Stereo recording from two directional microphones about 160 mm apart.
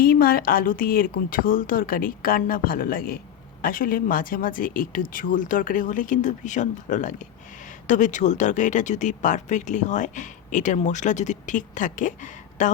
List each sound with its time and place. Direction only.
0.0 s speech: 70° left (ahead or behind); by 12.7 s 50° left (ahead or behind)